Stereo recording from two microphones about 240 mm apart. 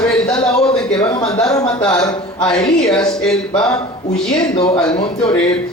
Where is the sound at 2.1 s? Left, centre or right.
Centre.